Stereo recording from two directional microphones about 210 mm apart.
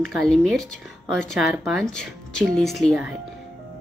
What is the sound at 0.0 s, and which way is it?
A woman's voice, centre (ahead or behind).